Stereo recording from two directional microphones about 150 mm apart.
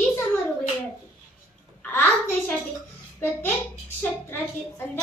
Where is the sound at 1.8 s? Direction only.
10° left (ahead or behind).